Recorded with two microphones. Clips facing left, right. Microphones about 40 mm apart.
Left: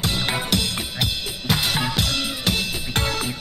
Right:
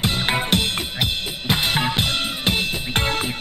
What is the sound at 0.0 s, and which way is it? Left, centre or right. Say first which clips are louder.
Music: right 3 dB; right.